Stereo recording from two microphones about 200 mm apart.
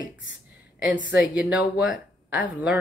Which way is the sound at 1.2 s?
5° right (ahead or behind).